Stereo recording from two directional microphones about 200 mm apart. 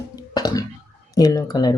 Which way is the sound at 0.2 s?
20° left (ahead or behind).